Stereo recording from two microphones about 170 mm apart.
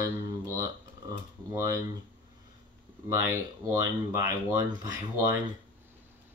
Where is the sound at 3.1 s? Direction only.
15° right (ahead or behind).